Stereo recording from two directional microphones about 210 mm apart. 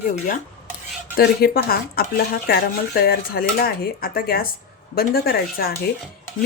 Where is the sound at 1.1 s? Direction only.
45° left (ahead or behind).